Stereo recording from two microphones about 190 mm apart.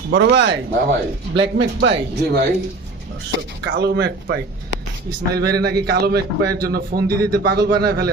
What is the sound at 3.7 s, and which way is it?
A man's voice, 65° right (ahead or behind).